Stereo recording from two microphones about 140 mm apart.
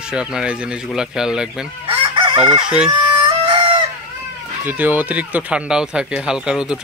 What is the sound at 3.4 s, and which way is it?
Chicken, 35° right (ahead or behind).